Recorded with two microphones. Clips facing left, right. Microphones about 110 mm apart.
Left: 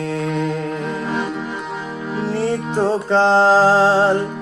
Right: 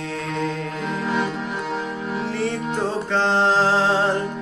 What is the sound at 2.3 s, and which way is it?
Music, 35° left (ahead or behind).